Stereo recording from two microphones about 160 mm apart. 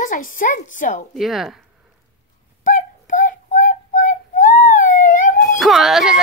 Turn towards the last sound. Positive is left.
turn(degrees=-5)  # may be behind; listen again after turning